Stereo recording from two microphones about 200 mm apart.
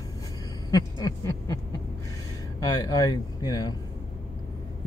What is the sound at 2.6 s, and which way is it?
Speech, 20° left (ahead or behind).